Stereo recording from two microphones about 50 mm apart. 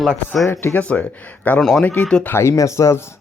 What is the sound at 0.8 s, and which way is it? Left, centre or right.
Speech, left.